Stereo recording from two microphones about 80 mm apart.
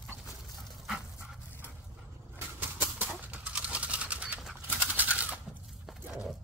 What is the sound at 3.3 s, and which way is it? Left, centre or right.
Pigeon, centre.